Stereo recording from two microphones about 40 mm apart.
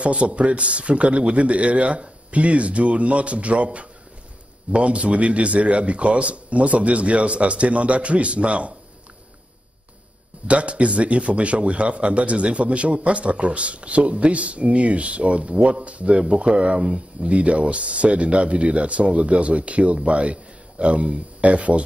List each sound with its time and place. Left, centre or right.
0.0 s a man's voice: right
10.4 s a man's voice: right